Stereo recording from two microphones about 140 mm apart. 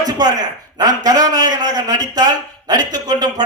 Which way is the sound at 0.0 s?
30° right (ahead or behind).